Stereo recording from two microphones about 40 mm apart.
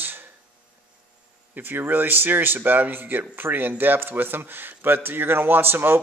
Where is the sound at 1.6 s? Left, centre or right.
Right.